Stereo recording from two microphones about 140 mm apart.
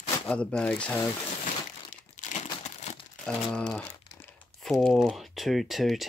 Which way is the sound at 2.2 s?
65° left (ahead or behind).